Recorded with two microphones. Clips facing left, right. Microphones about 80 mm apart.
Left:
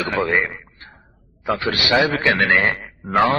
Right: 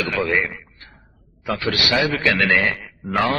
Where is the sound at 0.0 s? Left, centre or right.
Left.